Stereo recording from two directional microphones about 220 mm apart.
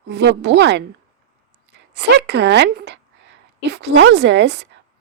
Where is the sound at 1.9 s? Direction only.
50° right (ahead or behind).